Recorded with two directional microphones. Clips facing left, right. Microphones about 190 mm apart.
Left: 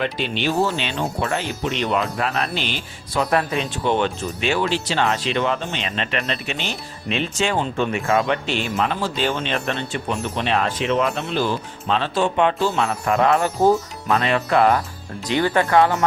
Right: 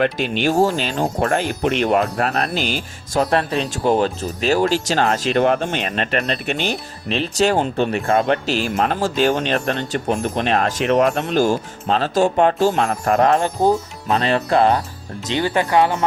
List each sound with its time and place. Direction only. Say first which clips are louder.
0.0 s speech: right 4 dB; 45° right (ahead or behind)
7.1 s speech: right 4 dB; 35° right (ahead or behind)
15.3 s speech: even; 20° right (ahead or behind)